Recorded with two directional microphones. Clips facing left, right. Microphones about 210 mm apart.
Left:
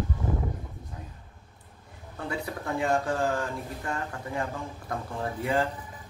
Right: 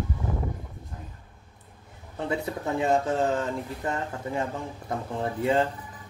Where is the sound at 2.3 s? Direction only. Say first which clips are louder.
Right 4 dB; 20° right (ahead or behind).